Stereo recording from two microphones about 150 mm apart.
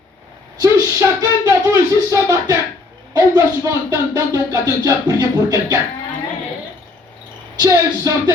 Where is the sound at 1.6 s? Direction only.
20° right (ahead or behind).